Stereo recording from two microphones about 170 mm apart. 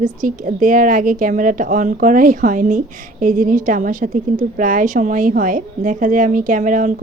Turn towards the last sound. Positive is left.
turn(degrees=-50)  # may be behind; listen again after turning